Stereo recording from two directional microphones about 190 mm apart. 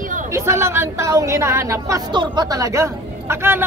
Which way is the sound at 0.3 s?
15° right (ahead or behind).